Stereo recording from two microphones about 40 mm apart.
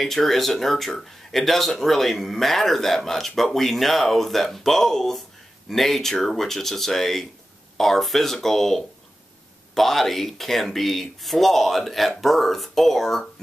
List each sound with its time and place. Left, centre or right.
0.0 s speech: centre